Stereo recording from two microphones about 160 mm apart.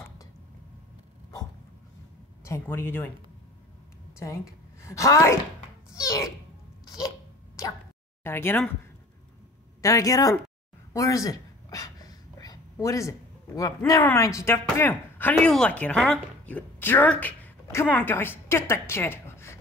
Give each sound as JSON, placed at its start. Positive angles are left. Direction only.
{"t": 2.4, "sound": "speech", "side_deg": 15}
{"t": 4.8, "sound": "a child's voice", "side_deg": 20}
{"t": 8.2, "sound": "speech", "side_deg": 15}
{"t": 9.8, "sound": "speech", "side_deg": 20}
{"t": 10.9, "sound": "a sound", "side_deg": 20}
{"t": 13.6, "sound": "speech", "side_deg": 20}